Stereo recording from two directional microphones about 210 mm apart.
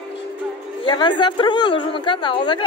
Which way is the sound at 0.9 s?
20° left (ahead or behind).